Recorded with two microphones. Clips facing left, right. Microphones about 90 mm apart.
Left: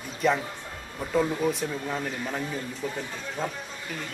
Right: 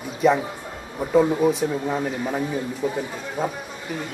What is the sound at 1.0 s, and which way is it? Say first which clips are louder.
A man's voice: right 7 dB; 15° right (ahead or behind).